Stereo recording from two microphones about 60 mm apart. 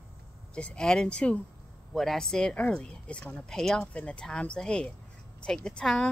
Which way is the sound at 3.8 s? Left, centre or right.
Left.